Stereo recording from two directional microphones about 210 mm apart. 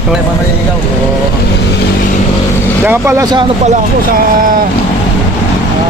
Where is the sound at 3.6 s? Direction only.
40° right (ahead or behind).